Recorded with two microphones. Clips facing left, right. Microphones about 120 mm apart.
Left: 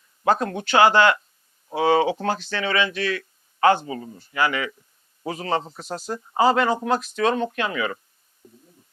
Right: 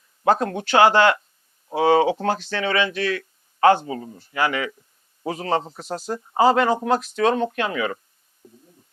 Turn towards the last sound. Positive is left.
turn(degrees=-45)  # may be behind; listen again after turning